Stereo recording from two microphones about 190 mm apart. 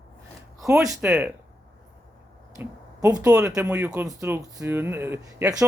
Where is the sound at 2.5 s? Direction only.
15° right (ahead or behind).